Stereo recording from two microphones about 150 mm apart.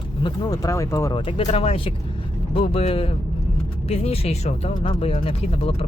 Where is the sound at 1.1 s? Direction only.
35° left (ahead or behind).